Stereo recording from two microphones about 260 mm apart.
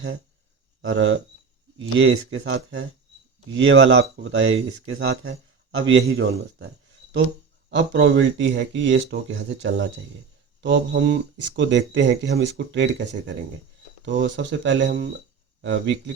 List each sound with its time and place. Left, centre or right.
0.8 s speech: right
7.7 s speech: right
10.6 s a sound: right
11.4 s speech: right